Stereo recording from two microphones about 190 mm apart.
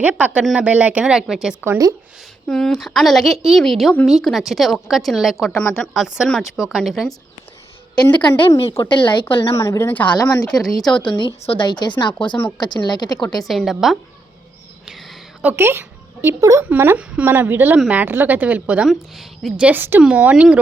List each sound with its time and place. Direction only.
0.0 s a woman's voice: 5° right (ahead or behind)
7.9 s speech: 20° left (ahead or behind)
9.6 s a woman's voice: 15° left (ahead or behind)
10.6 s a woman's voice: centre (ahead or behind)
11.4 s speech: 25° left (ahead or behind)
13.4 s a woman's voice: centre (ahead or behind)